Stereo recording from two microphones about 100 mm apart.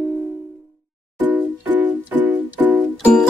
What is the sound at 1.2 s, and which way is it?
Music, 15° right (ahead or behind).